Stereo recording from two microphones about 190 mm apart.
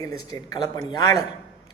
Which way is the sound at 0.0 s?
20° left (ahead or behind).